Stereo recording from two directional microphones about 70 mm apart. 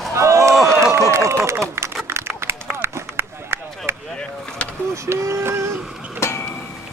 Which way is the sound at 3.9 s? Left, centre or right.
Right.